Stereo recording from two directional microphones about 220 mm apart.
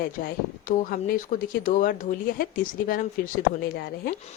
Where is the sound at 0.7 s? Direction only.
40° left (ahead or behind).